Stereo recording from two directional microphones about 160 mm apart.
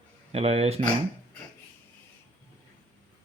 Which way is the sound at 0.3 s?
40° right (ahead or behind).